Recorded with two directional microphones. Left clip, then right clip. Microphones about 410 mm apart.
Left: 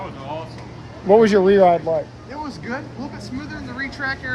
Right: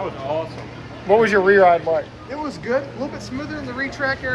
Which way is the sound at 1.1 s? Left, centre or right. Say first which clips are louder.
Left 1 dB; left.